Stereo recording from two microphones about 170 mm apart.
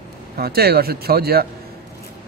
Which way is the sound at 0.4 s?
65° right (ahead or behind).